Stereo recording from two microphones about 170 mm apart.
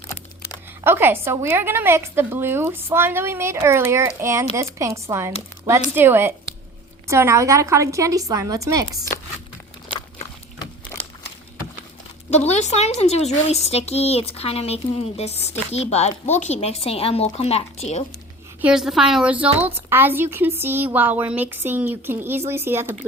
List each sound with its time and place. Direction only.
0.9 s a woman's voice: 15° right (ahead or behind)
12.3 s a woman's voice: 40° left (ahead or behind)
18.6 s a woman's voice: 5° right (ahead or behind)